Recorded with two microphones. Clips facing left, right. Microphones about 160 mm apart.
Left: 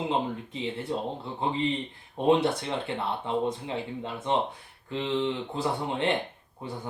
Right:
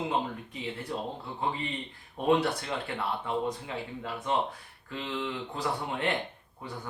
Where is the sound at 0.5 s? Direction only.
25° left (ahead or behind).